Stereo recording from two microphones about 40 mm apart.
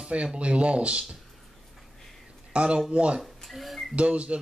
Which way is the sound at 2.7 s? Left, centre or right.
Centre.